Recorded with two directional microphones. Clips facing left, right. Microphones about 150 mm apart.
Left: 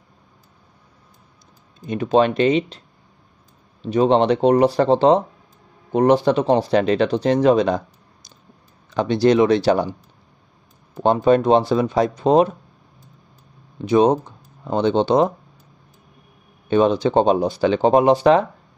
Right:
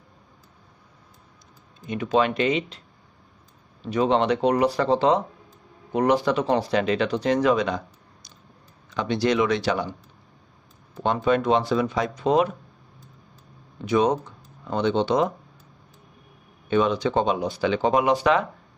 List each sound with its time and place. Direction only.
1.9 s speech: 35° left (ahead or behind)
3.9 s speech: 30° left (ahead or behind)
8.9 s speech: 35° left (ahead or behind)
11.0 s speech: 35° left (ahead or behind)
13.8 s speech: 30° left (ahead or behind)
16.6 s speech: 35° left (ahead or behind)